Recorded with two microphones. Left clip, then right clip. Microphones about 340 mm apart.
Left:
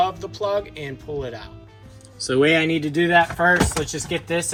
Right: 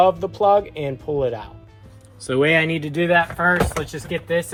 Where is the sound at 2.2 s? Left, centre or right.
Centre.